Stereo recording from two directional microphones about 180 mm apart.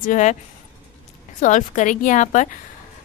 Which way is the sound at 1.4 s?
45° left (ahead or behind).